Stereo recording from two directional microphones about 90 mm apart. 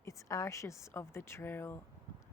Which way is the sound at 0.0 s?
35° left (ahead or behind).